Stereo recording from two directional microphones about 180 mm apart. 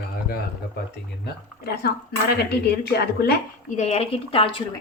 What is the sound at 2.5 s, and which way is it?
Speech, 65° left (ahead or behind).